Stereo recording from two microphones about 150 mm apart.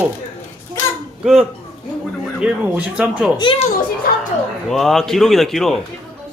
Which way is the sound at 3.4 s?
35° left (ahead or behind).